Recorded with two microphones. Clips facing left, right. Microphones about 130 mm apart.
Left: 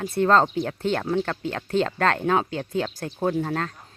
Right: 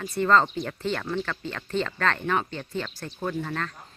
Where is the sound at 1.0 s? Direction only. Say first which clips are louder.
Left 5 dB; 40° left (ahead or behind); by 3.3 s 55° left (ahead or behind).